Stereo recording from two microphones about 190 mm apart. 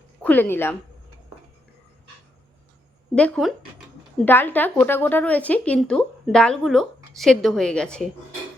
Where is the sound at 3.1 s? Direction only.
5° left (ahead or behind).